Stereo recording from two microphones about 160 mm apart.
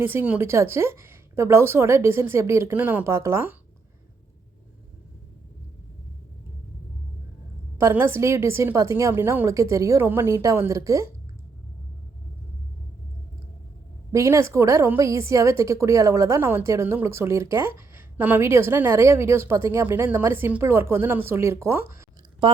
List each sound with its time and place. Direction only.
0.0 s a woman's voice: 15° right (ahead or behind)
7.8 s a woman's voice: 15° right (ahead or behind)
14.1 s a woman's voice: 20° right (ahead or behind)